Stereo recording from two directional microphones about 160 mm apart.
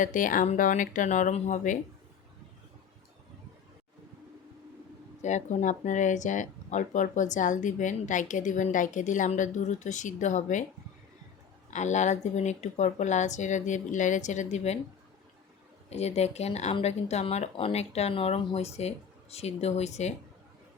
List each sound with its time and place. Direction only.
0.0 s speech: 55° left (ahead or behind)
5.2 s speech: 45° left (ahead or behind)
11.7 s speech: 45° left (ahead or behind)
15.9 s speech: 40° left (ahead or behind)